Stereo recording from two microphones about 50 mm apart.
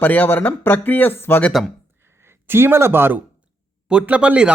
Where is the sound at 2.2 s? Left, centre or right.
Right.